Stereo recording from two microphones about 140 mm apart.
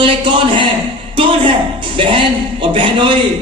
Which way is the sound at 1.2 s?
40° right (ahead or behind).